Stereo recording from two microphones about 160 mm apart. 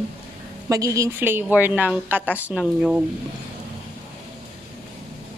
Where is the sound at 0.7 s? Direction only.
20° right (ahead or behind).